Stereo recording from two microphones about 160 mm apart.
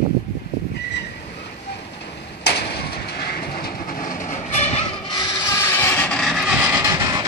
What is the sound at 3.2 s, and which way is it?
Train, 75° left (ahead or behind).